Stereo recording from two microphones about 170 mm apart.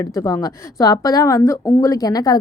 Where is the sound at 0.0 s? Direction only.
20° left (ahead or behind).